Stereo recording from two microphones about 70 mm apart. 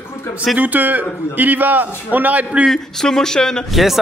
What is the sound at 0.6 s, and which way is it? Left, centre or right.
A man's voice, right.